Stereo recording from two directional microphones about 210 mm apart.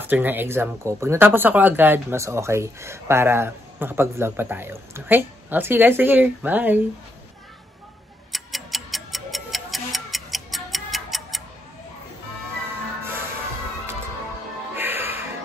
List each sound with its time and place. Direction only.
0.0 s speech: 10° right (ahead or behind)
8.3 s tick-tock: centre (ahead or behind)
14.8 s music: 10° right (ahead or behind)